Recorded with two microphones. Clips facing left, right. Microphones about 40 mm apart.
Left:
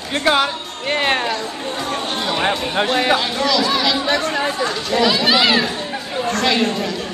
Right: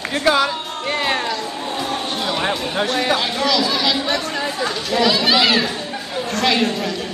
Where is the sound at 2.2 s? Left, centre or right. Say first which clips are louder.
Left 3 dB; centre.